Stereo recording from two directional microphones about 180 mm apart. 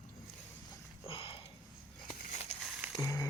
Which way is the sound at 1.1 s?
30° left (ahead or behind).